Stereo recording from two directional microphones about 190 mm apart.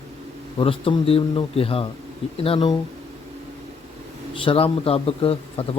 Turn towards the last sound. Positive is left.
turn(degrees=30)  # may be behind; listen again after turning